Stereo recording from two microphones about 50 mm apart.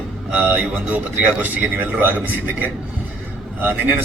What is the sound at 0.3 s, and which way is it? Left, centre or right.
Speech, right.